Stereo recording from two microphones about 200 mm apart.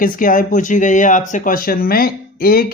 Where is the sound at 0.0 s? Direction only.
45° left (ahead or behind).